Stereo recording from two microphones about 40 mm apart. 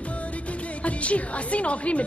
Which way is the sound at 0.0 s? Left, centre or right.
Left.